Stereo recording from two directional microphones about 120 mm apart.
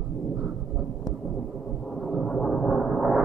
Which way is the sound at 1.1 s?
Centre (ahead or behind).